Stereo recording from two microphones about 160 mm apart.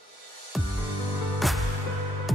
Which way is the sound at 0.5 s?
Centre (ahead or behind).